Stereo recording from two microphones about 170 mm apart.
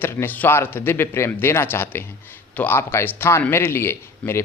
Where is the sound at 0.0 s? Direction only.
15° left (ahead or behind).